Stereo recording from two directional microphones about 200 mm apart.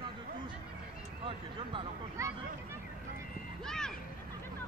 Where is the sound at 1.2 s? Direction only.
25° right (ahead or behind).